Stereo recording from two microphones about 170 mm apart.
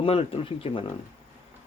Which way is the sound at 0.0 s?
30° left (ahead or behind).